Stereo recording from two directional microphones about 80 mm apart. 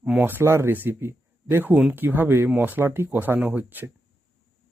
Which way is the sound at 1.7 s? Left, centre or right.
Centre.